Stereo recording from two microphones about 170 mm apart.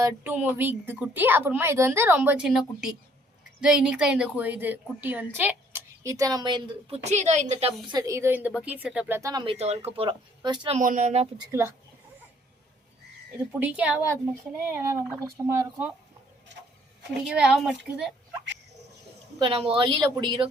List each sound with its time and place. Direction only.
0.0 s a woman's voice: 10° right (ahead or behind); by 6.7 s 25° right (ahead or behind)
7.0 s a woman's voice: 40° right (ahead or behind)
7.9 s a woman's voice: 20° right (ahead or behind)
9.3 s a woman's voice: 30° right (ahead or behind)
10.8 s a woman's voice: 45° right (ahead or behind)
11.5 s a woman's voice: 15° right (ahead or behind)
13.5 s a woman's voice: 10° right (ahead or behind)
17.2 s a woman's voice: 5° right (ahead or behind)
19.4 s speech: 30° right (ahead or behind)